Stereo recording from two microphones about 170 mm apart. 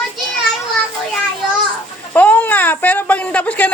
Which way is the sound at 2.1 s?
10° left (ahead or behind).